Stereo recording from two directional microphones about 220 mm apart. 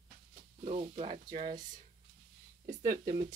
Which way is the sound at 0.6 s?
30° right (ahead or behind).